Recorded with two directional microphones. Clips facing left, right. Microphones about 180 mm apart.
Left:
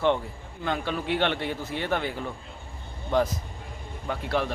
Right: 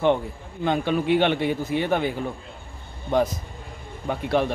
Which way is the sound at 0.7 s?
20° right (ahead or behind).